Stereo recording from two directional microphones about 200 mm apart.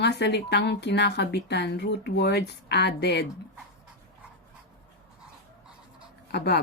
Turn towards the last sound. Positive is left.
turn(degrees=55)  # may be behind; listen again after turning